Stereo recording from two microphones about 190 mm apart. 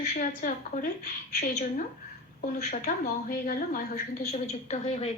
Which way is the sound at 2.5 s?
40° left (ahead or behind).